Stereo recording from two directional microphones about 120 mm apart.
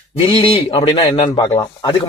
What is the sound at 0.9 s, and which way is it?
Speech, 35° left (ahead or behind).